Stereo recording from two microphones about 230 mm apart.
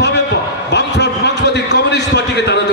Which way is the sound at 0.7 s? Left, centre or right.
Left.